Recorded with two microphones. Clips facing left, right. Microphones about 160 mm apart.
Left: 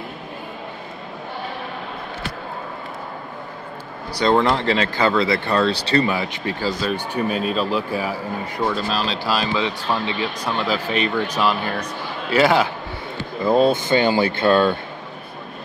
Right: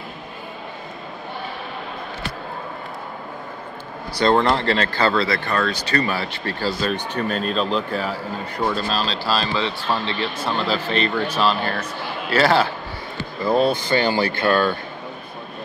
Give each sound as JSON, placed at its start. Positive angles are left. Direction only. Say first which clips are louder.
{"t": 4.1, "sound": "speech", "louder": "even", "side_deg": 10}